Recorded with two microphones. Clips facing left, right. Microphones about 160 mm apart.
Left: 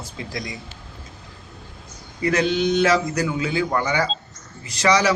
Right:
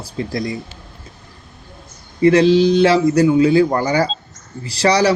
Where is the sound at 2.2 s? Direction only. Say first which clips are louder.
Right 9 dB; 30° right (ahead or behind).